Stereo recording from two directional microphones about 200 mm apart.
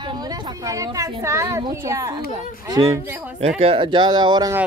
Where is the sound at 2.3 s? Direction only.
25° right (ahead or behind).